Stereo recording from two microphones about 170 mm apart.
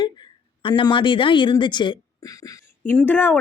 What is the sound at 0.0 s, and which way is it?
A woman's voice, 25° left (ahead or behind).